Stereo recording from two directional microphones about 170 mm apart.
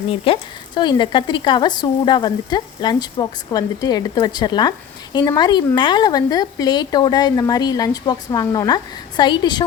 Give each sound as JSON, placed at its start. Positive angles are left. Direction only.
{"t": 0.1, "sound": "speech", "side_deg": 30}